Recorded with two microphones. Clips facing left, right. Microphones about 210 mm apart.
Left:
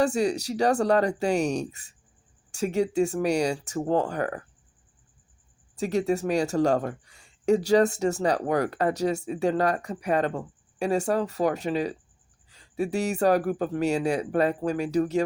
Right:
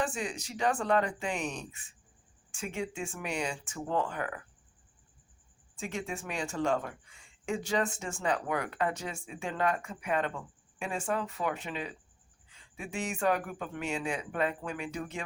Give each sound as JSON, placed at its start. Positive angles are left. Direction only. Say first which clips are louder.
{"t": 0.0, "sound": "speech", "louder": "left 10 dB", "side_deg": 40}
{"t": 5.7, "sound": "speech", "louder": "left 12 dB", "side_deg": 40}